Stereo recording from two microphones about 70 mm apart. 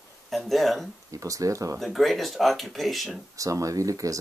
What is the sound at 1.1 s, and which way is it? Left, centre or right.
Speech, right.